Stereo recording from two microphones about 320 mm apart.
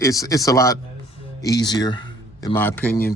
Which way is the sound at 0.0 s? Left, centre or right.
Centre.